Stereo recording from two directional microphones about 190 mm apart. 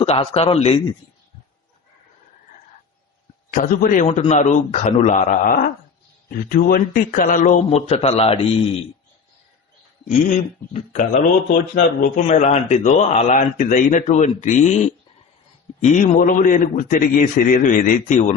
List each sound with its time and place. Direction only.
0.0 s a man's voice: 30° left (ahead or behind)
3.5 s a man's voice: 45° left (ahead or behind)
10.7 s a man's voice: 35° left (ahead or behind)